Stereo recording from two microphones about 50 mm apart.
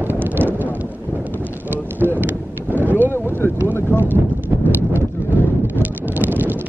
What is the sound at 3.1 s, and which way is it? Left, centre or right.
Boat, left.